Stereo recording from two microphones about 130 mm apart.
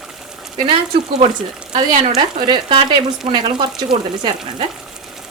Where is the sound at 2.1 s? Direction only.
40° right (ahead or behind).